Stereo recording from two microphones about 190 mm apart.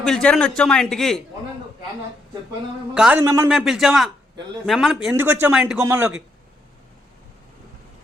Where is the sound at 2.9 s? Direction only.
5° right (ahead or behind).